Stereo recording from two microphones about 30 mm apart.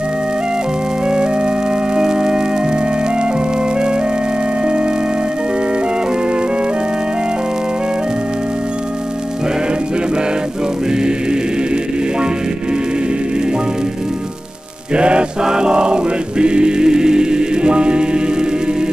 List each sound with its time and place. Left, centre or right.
1.0 s music: right
2.0 s organ: right
15.0 s mantra: right
15.4 s music: right